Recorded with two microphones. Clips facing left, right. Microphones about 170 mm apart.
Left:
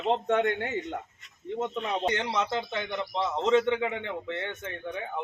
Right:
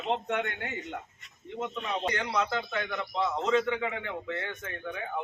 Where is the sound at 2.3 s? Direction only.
30° left (ahead or behind).